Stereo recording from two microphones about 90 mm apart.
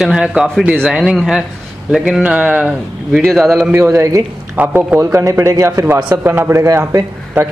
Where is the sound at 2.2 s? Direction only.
15° right (ahead or behind).